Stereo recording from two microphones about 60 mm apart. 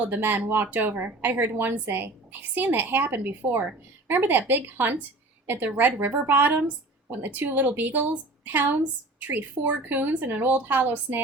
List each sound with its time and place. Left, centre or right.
0.0 s a woman's voice: right